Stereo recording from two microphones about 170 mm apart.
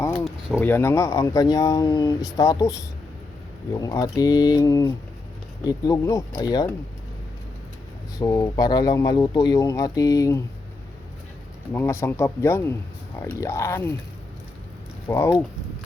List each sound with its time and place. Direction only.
0.3 s a sound: 5° right (ahead or behind)
0.6 s speech: 15° left (ahead or behind)
3.8 s speech: 20° left (ahead or behind)
8.2 s speech: 20° left (ahead or behind)
11.7 s speech: 15° left (ahead or behind)
15.0 s speech: 15° left (ahead or behind)